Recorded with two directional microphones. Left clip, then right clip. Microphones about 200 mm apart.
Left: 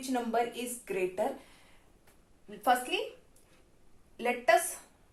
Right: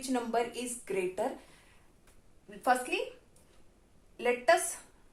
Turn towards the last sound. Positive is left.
turn(degrees=-15)  # may be behind; listen again after turning